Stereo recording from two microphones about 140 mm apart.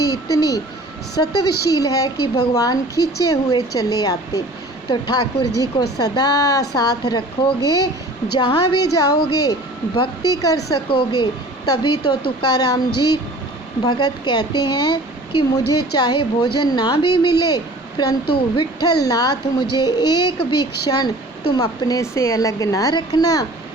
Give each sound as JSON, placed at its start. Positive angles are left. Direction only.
{"t": 0.0, "sound": "a woman's voice", "side_deg": 25}